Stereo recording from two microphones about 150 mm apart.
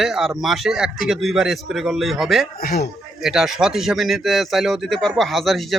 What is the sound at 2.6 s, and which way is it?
Speech, 90° left.